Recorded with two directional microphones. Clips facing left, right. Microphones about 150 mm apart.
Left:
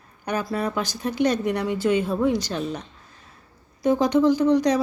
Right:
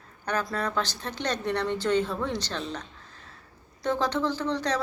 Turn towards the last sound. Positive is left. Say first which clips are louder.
# left 10 dB
turn(degrees=15)  # may be behind; listen again after turning